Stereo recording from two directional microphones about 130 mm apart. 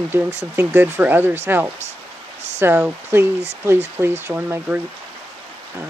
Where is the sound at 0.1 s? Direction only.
20° right (ahead or behind).